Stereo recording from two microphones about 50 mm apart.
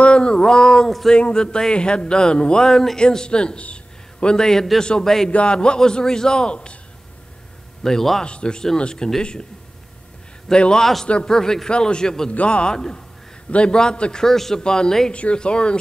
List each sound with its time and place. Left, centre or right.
0.0 s a sound: centre
0.8 s speech: centre
1.1 s speech: centre
5.3 s speech: centre
7.8 s speech: centre
8.2 s speech: centre
10.5 s a man's voice: centre